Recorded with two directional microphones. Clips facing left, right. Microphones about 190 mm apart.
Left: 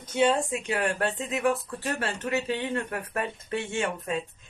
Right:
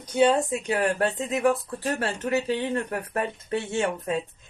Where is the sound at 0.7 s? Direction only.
40° right (ahead or behind).